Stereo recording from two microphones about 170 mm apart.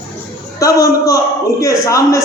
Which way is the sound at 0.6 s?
20° left (ahead or behind).